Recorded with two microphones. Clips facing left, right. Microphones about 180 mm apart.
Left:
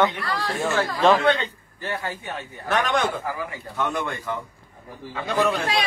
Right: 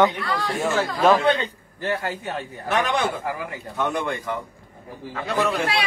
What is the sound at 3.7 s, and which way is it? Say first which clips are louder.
Speech: right 2 dB; 15° right (ahead or behind).